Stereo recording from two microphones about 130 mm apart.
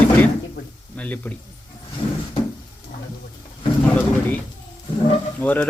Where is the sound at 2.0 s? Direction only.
45° left (ahead or behind).